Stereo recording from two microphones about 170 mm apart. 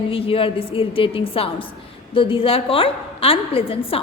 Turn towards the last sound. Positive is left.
turn(degrees=35)  # may be behind; listen again after turning